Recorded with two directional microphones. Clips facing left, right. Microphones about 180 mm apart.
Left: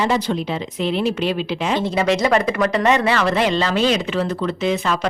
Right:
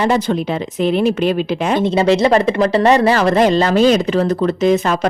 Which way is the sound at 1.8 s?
25° right (ahead or behind).